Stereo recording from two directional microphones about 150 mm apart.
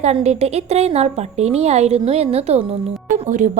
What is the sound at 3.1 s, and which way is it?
Speech, 60° right (ahead or behind).